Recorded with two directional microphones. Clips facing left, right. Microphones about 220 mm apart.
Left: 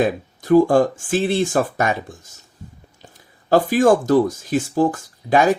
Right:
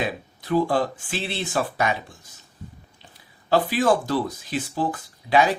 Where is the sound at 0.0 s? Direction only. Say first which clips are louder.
Left 8 dB; 45° left (ahead or behind).